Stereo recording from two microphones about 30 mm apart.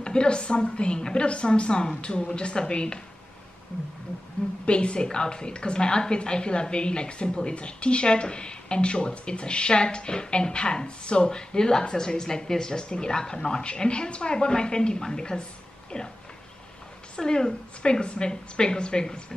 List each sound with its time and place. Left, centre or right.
0.0 s a woman's voice: left
4.6 s a woman's voice: left
17.2 s a woman's voice: left
18.0 s a woman's voice: left
18.3 s a woman's voice: left